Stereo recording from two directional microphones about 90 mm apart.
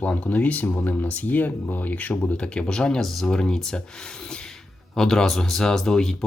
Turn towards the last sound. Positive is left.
turn(degrees=5)  # may be behind; listen again after turning